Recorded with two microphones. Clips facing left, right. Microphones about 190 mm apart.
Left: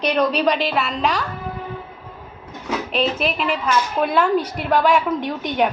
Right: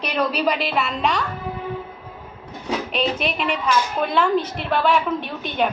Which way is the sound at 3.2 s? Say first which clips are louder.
Left 2 dB; centre (ahead or behind).